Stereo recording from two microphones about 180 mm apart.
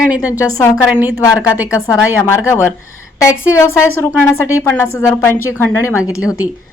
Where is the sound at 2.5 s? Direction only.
15° left (ahead or behind).